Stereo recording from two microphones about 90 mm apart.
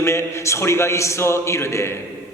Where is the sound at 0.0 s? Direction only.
30° left (ahead or behind).